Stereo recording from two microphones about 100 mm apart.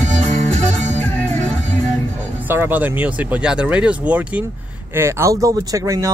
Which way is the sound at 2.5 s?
20° right (ahead or behind).